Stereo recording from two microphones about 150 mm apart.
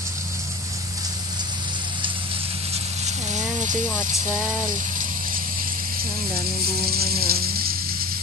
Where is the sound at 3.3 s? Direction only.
55° right (ahead or behind).